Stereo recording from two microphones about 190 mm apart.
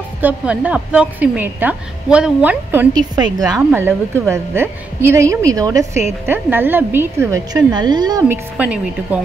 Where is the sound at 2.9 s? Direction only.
20° right (ahead or behind).